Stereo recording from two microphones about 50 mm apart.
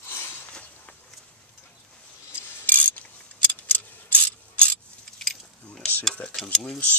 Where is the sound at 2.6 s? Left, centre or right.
Left.